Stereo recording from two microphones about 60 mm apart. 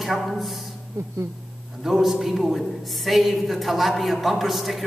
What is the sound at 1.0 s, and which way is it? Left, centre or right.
Speech, right.